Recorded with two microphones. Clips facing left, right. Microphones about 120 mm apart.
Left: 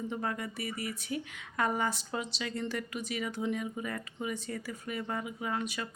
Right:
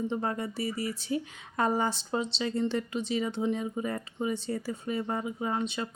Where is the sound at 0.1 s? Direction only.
30° right (ahead or behind).